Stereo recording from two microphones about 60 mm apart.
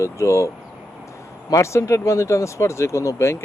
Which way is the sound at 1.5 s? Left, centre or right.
Left.